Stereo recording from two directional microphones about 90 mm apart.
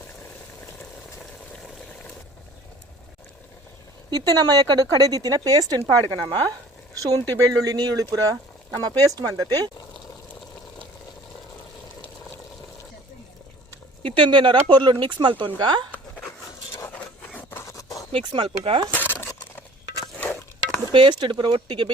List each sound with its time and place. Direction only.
4.1 s speech: 50° right (ahead or behind)
14.0 s speech: 65° right (ahead or behind)
16.7 s a sound: 20° left (ahead or behind)
17.6 s a sound: 40° left (ahead or behind)
18.1 s speech: 60° right (ahead or behind)
18.9 s coin: 20° left (ahead or behind)
20.9 s speech: 60° right (ahead or behind)